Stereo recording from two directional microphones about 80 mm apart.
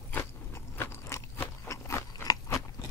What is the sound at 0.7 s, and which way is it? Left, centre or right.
Crunch, left.